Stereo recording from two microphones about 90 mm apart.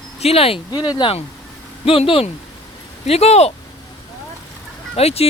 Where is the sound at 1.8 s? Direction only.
90° left.